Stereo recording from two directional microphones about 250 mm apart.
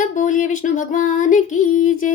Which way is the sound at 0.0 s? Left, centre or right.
Left.